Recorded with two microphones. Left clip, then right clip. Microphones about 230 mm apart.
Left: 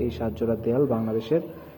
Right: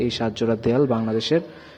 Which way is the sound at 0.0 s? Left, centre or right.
Right.